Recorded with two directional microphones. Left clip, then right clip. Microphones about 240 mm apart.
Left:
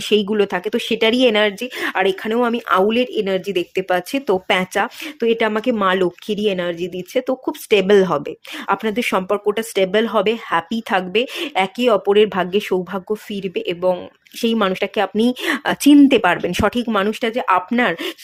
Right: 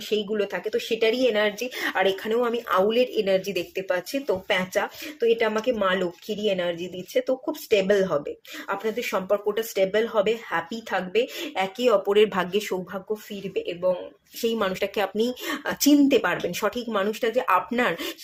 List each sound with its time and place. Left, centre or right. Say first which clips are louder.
0.1 s speech: left 8 dB; left
13.5 s speech: left 6 dB; left
14.4 s speech: left 6 dB; left